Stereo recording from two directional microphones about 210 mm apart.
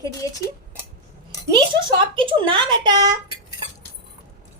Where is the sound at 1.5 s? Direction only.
25° right (ahead or behind).